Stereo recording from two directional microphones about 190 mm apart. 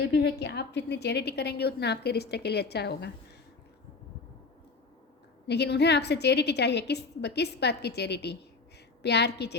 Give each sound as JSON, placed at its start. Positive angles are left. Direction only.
{"t": 0.0, "sound": "a woman's voice", "side_deg": 65}
{"t": 5.5, "sound": "a woman's voice", "side_deg": 60}